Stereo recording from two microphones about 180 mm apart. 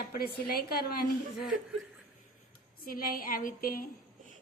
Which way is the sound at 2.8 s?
50° left (ahead or behind).